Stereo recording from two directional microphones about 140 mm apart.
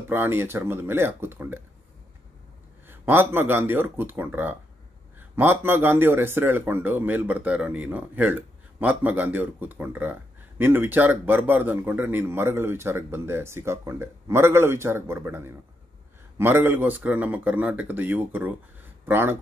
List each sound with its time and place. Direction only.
0.1 s a man's voice: 15° right (ahead or behind)
2.9 s a man's voice: 15° right (ahead or behind)